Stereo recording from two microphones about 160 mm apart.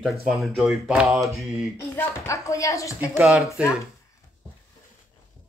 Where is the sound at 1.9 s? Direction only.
15° left (ahead or behind).